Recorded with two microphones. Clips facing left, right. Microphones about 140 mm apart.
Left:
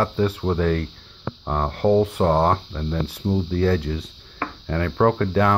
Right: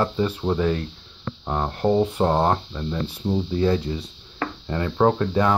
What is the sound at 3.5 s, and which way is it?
Speech, 20° right (ahead or behind).